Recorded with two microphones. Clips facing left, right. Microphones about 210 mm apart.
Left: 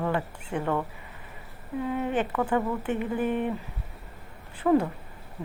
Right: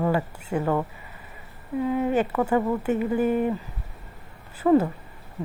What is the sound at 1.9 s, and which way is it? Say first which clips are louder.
Speech: right 5 dB; 10° right (ahead or behind).